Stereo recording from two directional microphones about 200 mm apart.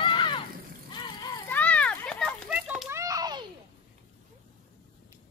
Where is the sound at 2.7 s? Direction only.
10° right (ahead or behind).